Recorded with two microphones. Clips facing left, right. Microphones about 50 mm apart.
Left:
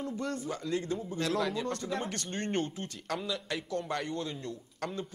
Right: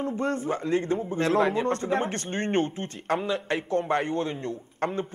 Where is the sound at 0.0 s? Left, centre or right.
Right.